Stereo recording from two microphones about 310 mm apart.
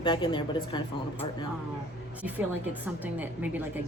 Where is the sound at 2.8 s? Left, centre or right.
Centre.